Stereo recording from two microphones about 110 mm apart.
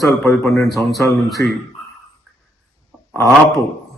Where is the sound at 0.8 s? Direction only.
Centre (ahead or behind).